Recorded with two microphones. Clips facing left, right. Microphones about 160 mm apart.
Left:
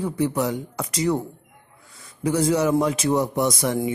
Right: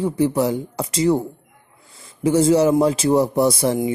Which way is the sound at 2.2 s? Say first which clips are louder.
Right 5 dB; 25° right (ahead or behind).